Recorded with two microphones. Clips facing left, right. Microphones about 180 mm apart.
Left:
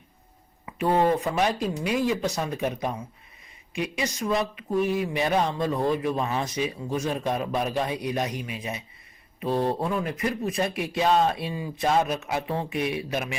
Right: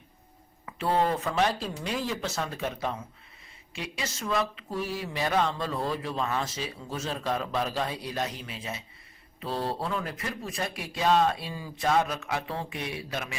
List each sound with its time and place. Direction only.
0.6 s speech: 15° left (ahead or behind)